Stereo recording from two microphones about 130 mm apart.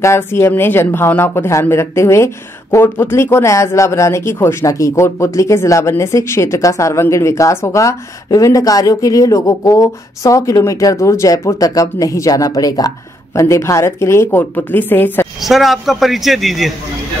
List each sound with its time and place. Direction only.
0.0 s speech: 20° left (ahead or behind)
15.4 s a man's voice: centre (ahead or behind)